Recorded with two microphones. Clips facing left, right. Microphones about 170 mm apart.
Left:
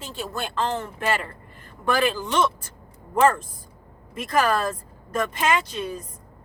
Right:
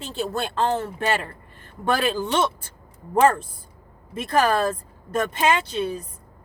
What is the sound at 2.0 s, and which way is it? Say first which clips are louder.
Speech: left 1 dB; 30° right (ahead or behind).